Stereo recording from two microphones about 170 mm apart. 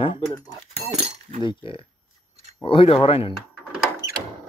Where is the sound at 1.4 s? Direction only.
30° left (ahead or behind).